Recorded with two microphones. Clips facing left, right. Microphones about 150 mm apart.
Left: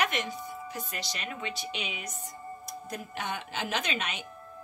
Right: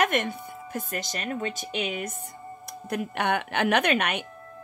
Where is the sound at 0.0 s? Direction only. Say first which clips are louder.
Right 6 dB; 55° right (ahead or behind).